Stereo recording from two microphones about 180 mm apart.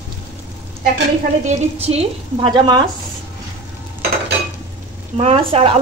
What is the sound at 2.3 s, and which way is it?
Speech, 25° right (ahead or behind).